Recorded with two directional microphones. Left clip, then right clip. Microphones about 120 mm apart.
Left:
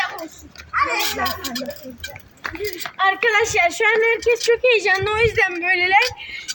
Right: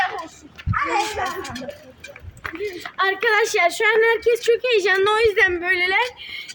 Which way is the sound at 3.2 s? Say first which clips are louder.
Right 2 dB; 15° right (ahead or behind).